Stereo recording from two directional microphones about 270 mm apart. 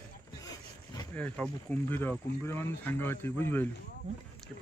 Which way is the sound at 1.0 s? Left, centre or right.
Centre.